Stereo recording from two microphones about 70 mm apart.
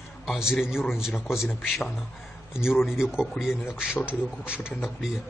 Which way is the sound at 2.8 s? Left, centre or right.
Centre.